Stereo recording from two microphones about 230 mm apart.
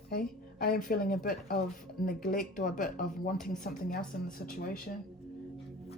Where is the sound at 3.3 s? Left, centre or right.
Centre.